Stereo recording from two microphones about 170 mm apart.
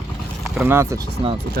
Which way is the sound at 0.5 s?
10° right (ahead or behind).